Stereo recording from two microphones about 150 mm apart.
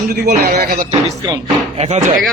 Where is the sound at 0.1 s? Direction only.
85° right.